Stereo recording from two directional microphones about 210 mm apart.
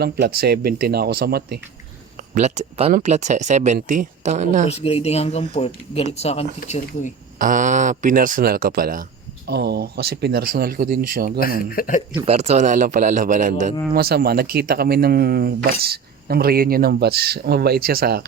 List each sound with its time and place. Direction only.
0.0 s speech: 50° right (ahead or behind)
2.3 s speech: 30° right (ahead or behind)
4.7 s speech: 30° left (ahead or behind)
7.3 s speech: 40° right (ahead or behind)
11.3 s speech: 45° left (ahead or behind)
12.2 s speech: 30° right (ahead or behind); by 18.3 s 50° right (ahead or behind)